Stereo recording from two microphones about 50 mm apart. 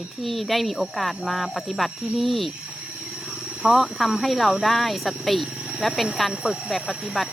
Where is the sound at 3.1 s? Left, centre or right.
Centre.